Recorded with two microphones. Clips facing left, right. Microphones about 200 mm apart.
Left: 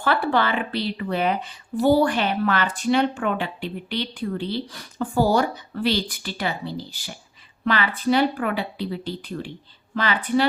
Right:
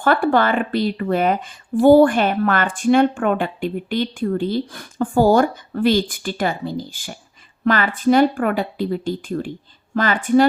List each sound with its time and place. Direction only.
0.0 s speech: 50° right (ahead or behind)